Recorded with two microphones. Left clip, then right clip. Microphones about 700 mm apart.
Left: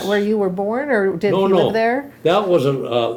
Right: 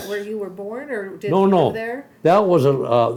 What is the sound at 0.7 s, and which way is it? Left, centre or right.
Speech, left.